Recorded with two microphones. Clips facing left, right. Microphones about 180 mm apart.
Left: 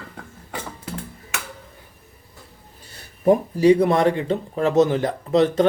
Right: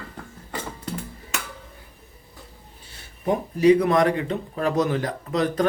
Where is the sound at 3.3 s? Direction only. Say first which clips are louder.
Left 3 dB; 30° left (ahead or behind).